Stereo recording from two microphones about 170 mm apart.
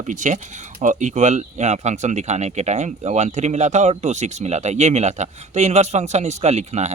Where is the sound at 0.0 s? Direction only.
45° right (ahead or behind).